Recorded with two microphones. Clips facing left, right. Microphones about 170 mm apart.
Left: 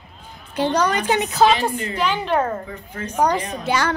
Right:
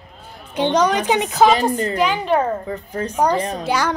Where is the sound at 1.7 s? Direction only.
40° right (ahead or behind).